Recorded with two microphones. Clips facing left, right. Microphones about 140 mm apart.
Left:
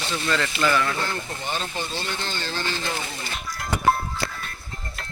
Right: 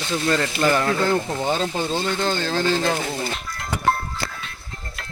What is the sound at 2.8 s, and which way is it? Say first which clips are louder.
Speech: right 7 dB; 55° right (ahead or behind).